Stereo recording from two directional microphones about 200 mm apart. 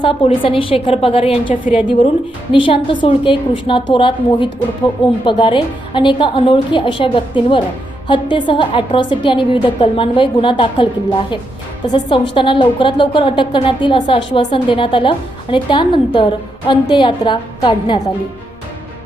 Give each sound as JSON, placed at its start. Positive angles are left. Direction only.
{"t": 0.0, "sound": "a woman's voice", "side_deg": 25}
{"t": 1.6, "sound": "a woman's voice", "side_deg": -5}
{"t": 2.5, "sound": "a woman's voice", "side_deg": 25}
{"t": 11.9, "sound": "a woman's voice", "side_deg": 20}